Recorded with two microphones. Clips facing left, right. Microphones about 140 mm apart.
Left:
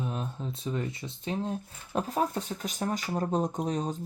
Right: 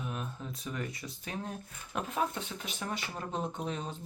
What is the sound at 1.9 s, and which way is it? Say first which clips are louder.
Speech: left 5 dB; 35° left (ahead or behind).